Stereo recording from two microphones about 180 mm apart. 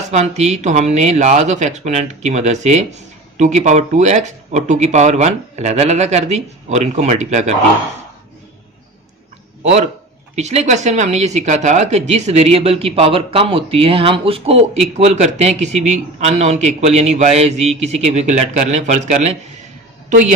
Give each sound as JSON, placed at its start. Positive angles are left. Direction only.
{"t": 0.1, "sound": "speech", "side_deg": -40}
{"t": 10.3, "sound": "a woman's voice", "side_deg": -40}